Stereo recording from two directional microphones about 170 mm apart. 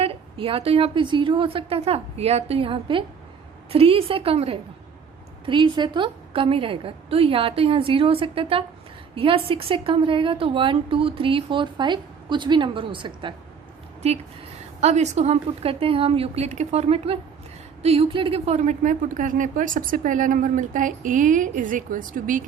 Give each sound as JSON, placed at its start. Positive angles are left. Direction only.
{"t": 0.0, "sound": "a woman's voice", "side_deg": -35}
{"t": 14.8, "sound": "a woman's voice", "side_deg": -40}